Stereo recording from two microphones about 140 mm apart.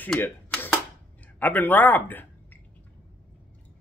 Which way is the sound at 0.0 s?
10° left (ahead or behind).